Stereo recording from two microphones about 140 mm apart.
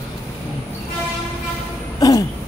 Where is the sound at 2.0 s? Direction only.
25° left (ahead or behind).